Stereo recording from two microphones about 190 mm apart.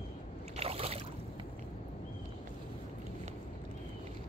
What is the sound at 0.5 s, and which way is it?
Boat, 30° right (ahead or behind).